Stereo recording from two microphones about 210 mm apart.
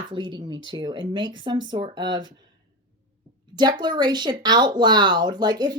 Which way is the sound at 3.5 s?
20° right (ahead or behind).